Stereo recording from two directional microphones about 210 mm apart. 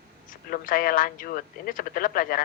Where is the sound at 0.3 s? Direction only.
40° left (ahead or behind).